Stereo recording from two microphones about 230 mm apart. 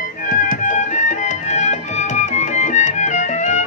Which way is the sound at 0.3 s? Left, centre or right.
Left.